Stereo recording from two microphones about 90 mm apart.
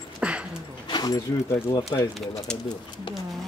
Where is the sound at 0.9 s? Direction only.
50° left (ahead or behind).